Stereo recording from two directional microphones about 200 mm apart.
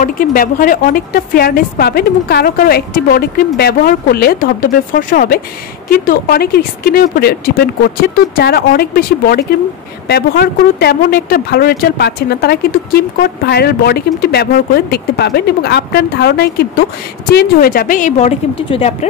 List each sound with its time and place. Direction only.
0.0 s a woman's voice: 45° left (ahead or behind)